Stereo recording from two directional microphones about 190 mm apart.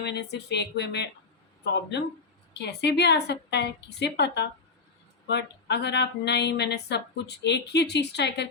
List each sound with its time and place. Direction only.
0.0 s speech: 60° left (ahead or behind)